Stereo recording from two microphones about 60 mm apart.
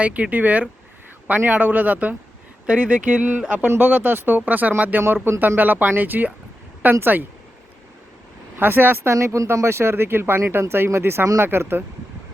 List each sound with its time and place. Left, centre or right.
0.0 s speech: right
5.0 s speech: right
8.5 s speech: right
9.0 s speech: right
9.6 s speech: right